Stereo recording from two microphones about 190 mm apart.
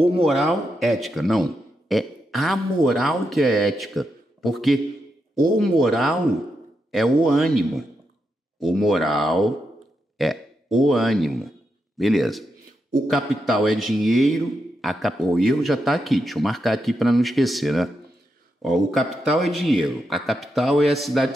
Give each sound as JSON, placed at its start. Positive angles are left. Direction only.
{"t": 0.2, "sound": "a man's voice", "side_deg": 0}